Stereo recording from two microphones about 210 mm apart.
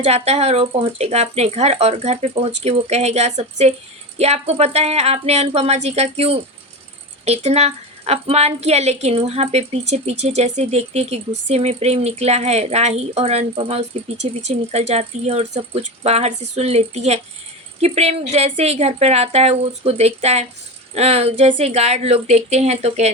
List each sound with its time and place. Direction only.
0.0 s a woman's voice: 30° right (ahead or behind)